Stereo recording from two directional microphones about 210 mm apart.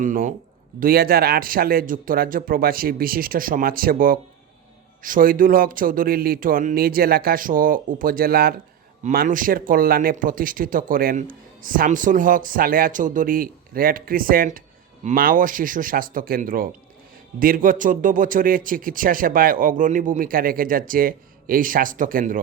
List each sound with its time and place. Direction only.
0.0 s speech: 40° right (ahead or behind)